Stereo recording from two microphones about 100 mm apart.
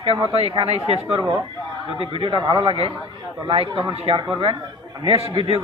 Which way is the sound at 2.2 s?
55° right (ahead or behind).